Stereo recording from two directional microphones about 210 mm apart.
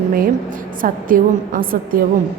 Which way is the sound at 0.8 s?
40° right (ahead or behind).